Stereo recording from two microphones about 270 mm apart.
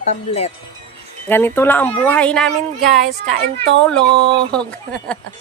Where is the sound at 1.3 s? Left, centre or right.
Centre.